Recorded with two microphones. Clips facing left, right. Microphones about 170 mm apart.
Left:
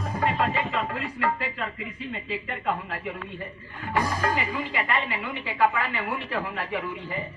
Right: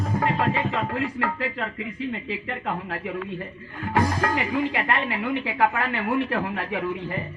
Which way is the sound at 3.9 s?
55° right (ahead or behind).